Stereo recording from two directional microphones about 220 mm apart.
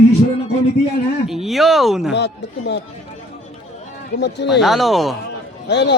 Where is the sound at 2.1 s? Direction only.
50° left (ahead or behind).